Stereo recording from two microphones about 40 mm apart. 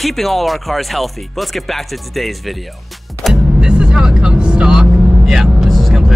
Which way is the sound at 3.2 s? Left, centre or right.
Centre.